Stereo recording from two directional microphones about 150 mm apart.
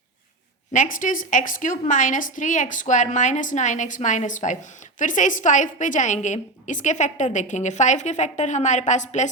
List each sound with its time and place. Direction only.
0.7 s a woman's voice: 60° left (ahead or behind)